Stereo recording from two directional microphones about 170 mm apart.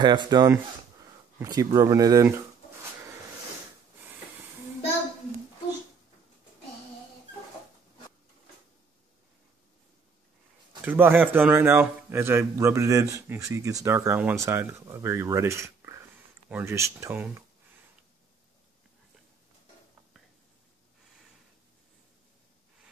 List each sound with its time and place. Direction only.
0.0 s speech: 25° right (ahead or behind)
10.8 s a man's voice: 10° right (ahead or behind)